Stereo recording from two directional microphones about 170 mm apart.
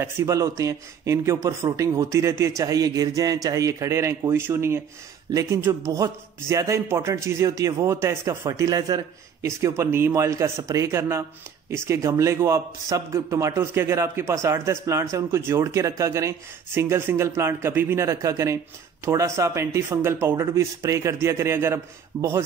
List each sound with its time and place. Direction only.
0.0 s speech: 15° right (ahead or behind)